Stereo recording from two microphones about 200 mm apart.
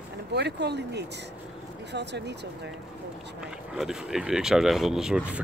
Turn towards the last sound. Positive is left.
turn(degrees=-5)  # may be behind; listen again after turning